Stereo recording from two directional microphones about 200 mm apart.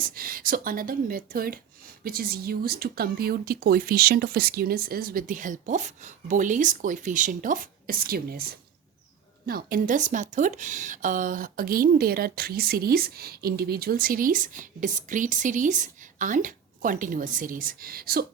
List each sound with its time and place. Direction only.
0.0 s speech: 45° right (ahead or behind)